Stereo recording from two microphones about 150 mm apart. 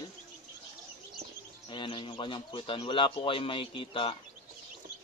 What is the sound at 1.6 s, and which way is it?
A man's voice, 30° left (ahead or behind).